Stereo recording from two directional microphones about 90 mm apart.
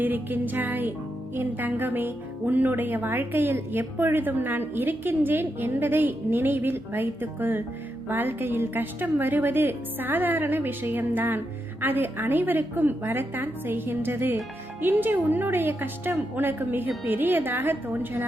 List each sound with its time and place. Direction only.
0.0 s speech: 20° right (ahead or behind)